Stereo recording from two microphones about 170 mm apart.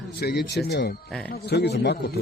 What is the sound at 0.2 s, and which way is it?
A man's voice, 70° left (ahead or behind).